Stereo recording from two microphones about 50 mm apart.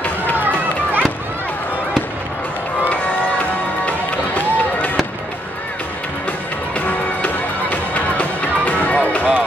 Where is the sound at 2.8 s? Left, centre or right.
Left.